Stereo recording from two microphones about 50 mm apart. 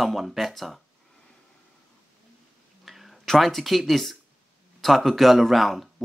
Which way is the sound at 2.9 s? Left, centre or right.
Centre.